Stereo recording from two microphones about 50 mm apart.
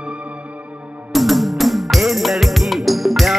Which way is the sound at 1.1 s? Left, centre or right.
Centre.